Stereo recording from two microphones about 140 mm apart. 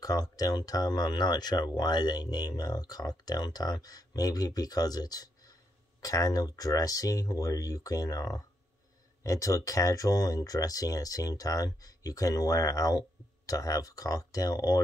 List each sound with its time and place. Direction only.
0.0 s speech: 25° left (ahead or behind)